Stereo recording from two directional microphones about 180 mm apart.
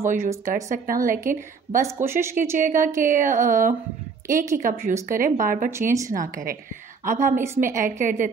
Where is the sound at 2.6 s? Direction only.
45° right (ahead or behind).